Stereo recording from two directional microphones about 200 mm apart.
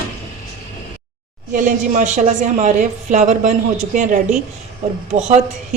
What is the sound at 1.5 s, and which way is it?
A woman's voice, 40° right (ahead or behind).